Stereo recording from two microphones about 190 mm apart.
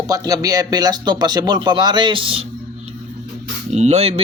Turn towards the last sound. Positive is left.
turn(degrees=-35)  # may be behind; listen again after turning